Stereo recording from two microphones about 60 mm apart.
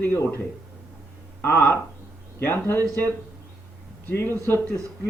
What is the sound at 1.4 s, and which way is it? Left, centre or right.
A man's voice, left.